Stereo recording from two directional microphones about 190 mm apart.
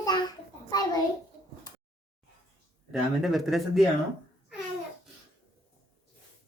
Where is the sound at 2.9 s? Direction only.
Centre (ahead or behind).